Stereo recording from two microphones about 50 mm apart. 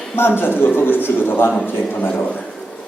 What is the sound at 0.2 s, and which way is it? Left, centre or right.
A man's voice, left.